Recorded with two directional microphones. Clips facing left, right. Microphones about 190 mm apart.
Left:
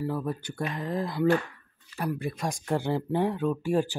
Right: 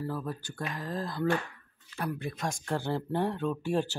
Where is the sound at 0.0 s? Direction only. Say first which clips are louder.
Left 5 dB; 15° left (ahead or behind).